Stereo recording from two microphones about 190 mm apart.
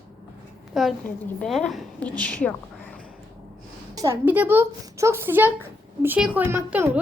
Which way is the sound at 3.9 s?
15° right (ahead or behind).